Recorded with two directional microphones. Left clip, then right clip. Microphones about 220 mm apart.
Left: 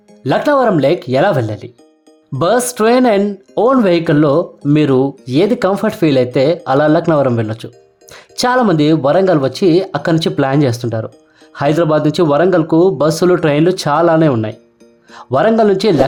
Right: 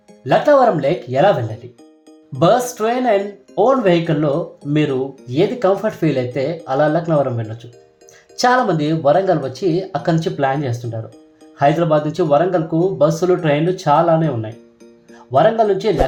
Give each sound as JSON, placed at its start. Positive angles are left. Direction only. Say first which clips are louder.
{"t": 0.3, "sound": "a man's voice", "louder": "even", "side_deg": 40}